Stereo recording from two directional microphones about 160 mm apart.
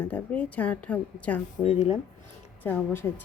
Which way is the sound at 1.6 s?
45° left (ahead or behind).